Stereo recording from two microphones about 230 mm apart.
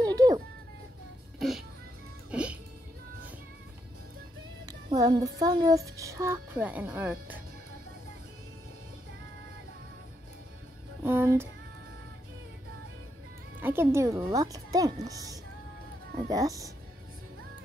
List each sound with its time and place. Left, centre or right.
0.0 s a sound: centre
2.3 s music: centre
4.6 s speech: centre
11.1 s music: centre
13.6 s speech: centre